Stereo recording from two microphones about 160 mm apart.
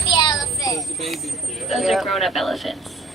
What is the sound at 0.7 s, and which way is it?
Speech, centre (ahead or behind).